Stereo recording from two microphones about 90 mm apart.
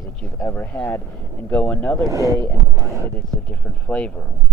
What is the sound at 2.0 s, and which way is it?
Speech, 40° right (ahead or behind).